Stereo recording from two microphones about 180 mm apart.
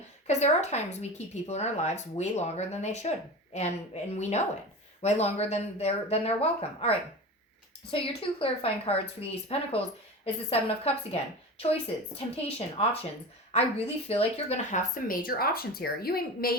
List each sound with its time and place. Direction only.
0.3 s speech: 40° left (ahead or behind); by 16.6 s 55° left (ahead or behind)